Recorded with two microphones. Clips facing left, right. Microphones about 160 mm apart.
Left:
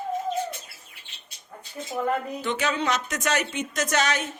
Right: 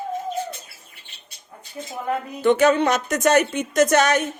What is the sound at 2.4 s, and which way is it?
Speech, 50° right (ahead or behind).